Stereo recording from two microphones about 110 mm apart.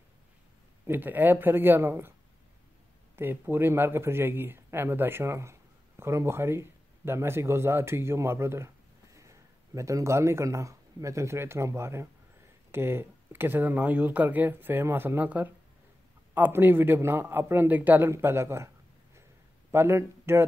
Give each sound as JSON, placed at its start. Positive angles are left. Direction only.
{"t": 0.8, "sound": "a man's voice", "side_deg": -15}
{"t": 3.2, "sound": "a man's voice", "side_deg": -20}
{"t": 19.7, "sound": "speech", "side_deg": -25}